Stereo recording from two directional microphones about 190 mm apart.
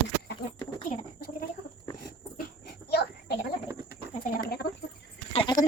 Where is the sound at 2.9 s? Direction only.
60° left (ahead or behind).